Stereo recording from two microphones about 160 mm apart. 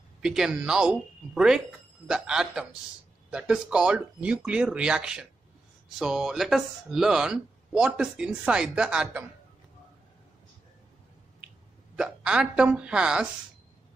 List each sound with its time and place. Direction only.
0.2 s speech: 5° right (ahead or behind)
12.0 s speech: 5° right (ahead or behind)